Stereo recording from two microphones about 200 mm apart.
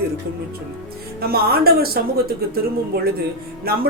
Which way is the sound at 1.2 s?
50° right (ahead or behind).